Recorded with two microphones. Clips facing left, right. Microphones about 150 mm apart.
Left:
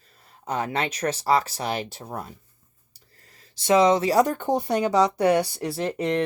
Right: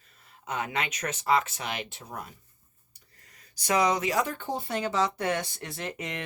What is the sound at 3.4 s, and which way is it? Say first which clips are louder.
Speech: left 7 dB; 25° left (ahead or behind).